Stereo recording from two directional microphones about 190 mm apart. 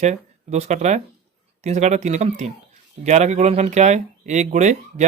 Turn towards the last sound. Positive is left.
turn(degrees=-40)  # may be behind; listen again after turning